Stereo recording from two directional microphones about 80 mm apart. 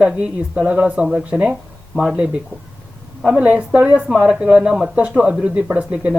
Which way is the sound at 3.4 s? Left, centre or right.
Centre.